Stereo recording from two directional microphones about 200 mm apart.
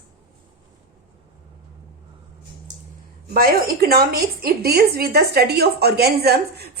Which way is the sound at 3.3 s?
50° right (ahead or behind).